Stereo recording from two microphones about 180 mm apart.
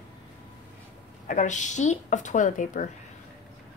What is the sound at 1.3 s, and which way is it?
A woman's voice, 45° left (ahead or behind).